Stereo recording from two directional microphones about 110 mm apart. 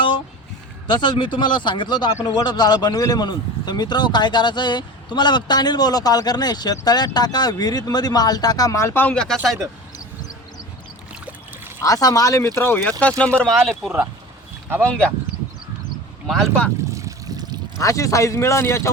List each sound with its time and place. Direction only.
0.9 s speech: 45° left (ahead or behind); by 9.1 s 20° left (ahead or behind)
9.1 s speech: 5° left (ahead or behind)
11.8 s speech: 30° left (ahead or behind)
12.5 s speech: 20° left (ahead or behind)
16.2 s speech: centre (ahead or behind)
16.9 s trickle: 30° right (ahead or behind)
17.7 s speech: 30° left (ahead or behind)